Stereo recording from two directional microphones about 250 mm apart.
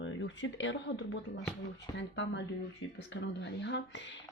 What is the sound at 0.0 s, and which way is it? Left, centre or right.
Speech, left.